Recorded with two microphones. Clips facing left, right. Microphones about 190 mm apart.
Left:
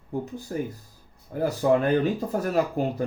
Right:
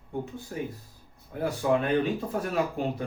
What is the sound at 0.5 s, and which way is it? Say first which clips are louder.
Speech: left 5 dB; 45° left (ahead or behind).